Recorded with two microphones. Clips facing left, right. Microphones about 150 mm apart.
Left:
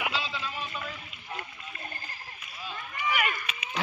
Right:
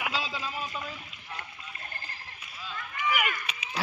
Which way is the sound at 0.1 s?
40° right (ahead or behind).